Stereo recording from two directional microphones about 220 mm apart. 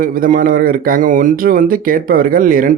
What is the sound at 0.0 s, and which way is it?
Speech, 40° right (ahead or behind).